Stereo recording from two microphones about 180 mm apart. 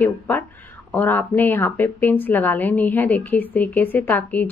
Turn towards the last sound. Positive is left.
turn(degrees=10)  # may be behind; listen again after turning